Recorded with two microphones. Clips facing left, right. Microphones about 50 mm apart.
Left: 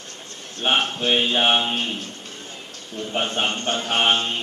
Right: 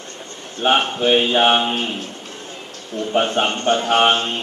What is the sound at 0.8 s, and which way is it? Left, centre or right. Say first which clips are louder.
Speech: right 4 dB; centre.